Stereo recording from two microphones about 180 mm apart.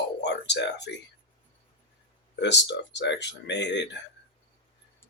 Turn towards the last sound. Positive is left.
turn(degrees=75)  # may be behind; listen again after turning